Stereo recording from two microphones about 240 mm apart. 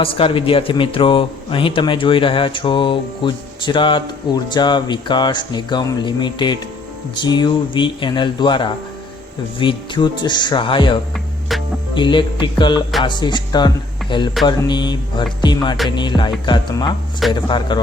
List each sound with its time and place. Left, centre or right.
0.0 s speech: left
11.9 s speech: centre